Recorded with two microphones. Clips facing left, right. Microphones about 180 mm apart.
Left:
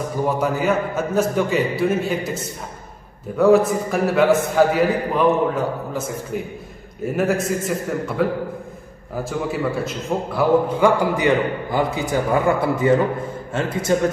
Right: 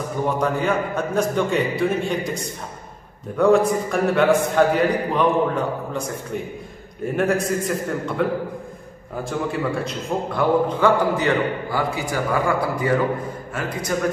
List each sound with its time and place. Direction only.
0.4 s a man's voice: 5° left (ahead or behind)
11.1 s a man's voice: 20° left (ahead or behind)